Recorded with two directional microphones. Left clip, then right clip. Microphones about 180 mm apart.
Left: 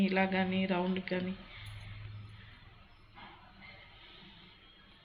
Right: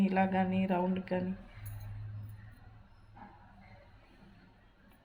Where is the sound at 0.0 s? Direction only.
40° right (ahead or behind).